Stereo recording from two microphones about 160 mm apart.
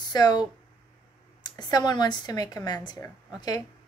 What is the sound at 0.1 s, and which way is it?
A woman's voice, 25° left (ahead or behind).